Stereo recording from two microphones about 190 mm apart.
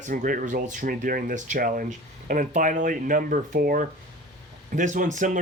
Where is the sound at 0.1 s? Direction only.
45° right (ahead or behind).